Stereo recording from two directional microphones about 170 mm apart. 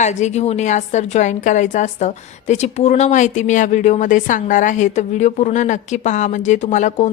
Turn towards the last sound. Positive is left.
turn(degrees=45)  # may be behind; listen again after turning